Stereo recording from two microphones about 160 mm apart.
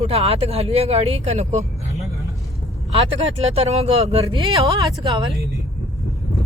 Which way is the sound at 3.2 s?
40° right (ahead or behind).